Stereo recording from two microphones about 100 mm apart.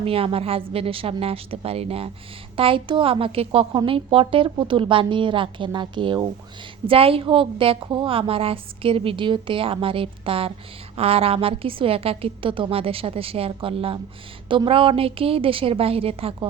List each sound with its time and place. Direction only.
0.0 s a woman's voice: 70° right (ahead or behind)
2.6 s a woman's voice: 60° right (ahead or behind); by 3.7 s 75° right (ahead or behind)
3.7 s a woman's voice: 50° right (ahead or behind)
3.9 s a woman's voice: 65° right (ahead or behind)
6.8 s a woman's voice: 70° right (ahead or behind)
7.8 s a woman's voice: 50° right (ahead or behind)
10.9 s a woman's voice: 80° right